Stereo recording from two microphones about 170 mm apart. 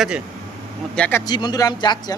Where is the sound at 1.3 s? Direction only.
25° left (ahead or behind).